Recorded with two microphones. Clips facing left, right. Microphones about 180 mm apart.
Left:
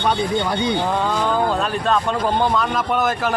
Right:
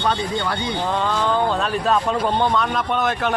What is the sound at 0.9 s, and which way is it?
Speech, 10° left (ahead or behind).